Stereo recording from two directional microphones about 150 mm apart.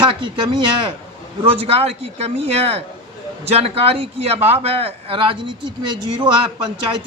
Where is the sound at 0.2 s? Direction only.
30° right (ahead or behind).